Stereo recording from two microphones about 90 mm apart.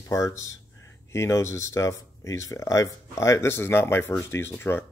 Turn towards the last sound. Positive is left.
turn(degrees=25)  # may be behind; listen again after turning